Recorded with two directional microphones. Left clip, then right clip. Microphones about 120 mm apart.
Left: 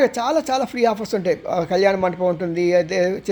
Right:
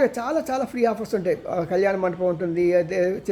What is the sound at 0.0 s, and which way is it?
Speech, 20° left (ahead or behind).